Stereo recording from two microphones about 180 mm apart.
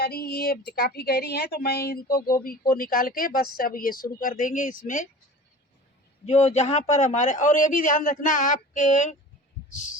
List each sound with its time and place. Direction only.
0.0 s speech: 60° left (ahead or behind)
6.2 s speech: 40° left (ahead or behind)